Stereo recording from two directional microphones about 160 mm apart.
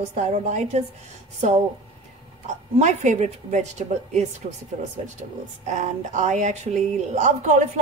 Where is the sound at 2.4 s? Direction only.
45° right (ahead or behind).